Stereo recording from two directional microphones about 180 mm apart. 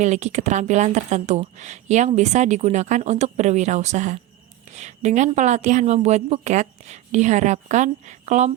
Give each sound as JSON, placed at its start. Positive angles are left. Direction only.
{"t": 0.0, "sound": "speech", "side_deg": -40}